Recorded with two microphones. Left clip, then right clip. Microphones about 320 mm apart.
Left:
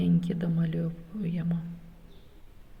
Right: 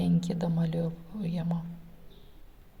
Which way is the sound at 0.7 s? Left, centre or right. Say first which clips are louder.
Right 2 dB; right.